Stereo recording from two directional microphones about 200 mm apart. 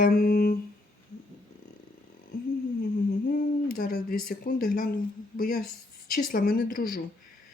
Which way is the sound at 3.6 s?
45° left (ahead or behind).